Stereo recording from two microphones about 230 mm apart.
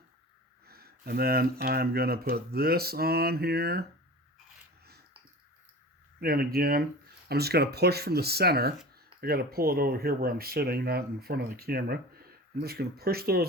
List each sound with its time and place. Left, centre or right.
0.7 s speech: right
6.1 s speech: right